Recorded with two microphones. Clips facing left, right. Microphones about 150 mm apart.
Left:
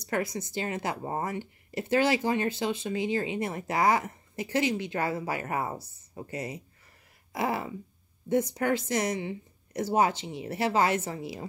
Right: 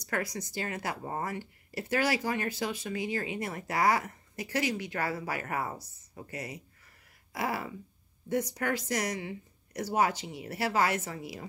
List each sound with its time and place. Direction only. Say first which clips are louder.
0.0 s speech: left 4 dB; 25° left (ahead or behind)